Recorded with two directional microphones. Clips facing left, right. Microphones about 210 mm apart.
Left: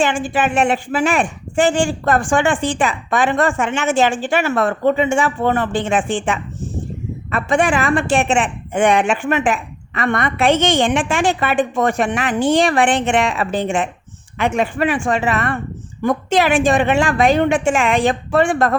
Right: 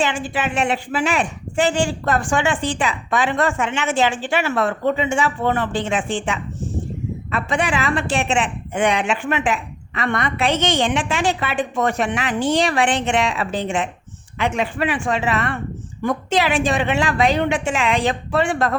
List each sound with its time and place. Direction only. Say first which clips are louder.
0.0 s a woman's voice: left 4 dB; 50° left (ahead or behind)